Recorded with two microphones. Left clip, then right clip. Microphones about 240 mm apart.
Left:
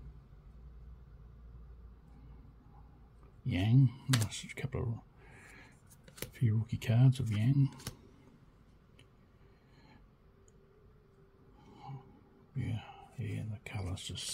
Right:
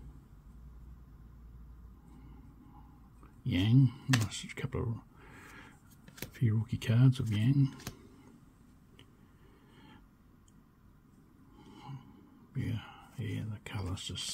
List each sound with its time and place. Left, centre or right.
3.4 s speech: centre
4.3 s a sound: centre
6.3 s speech: centre
12.5 s speech: centre